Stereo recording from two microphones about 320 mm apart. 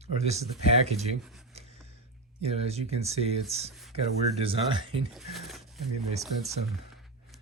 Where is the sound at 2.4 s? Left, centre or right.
Centre.